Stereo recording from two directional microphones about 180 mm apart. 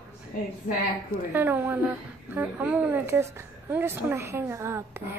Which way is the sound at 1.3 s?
10° right (ahead or behind).